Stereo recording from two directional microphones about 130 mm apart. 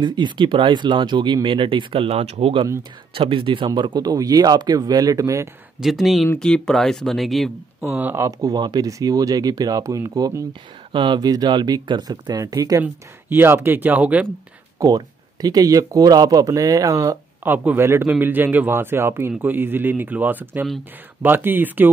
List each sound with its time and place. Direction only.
0.0 s speech: 35° right (ahead or behind)
5.8 s speech: centre (ahead or behind)
7.9 s speech: 15° right (ahead or behind)
12.8 s speech: 15° right (ahead or behind)
14.8 s speech: 30° right (ahead or behind)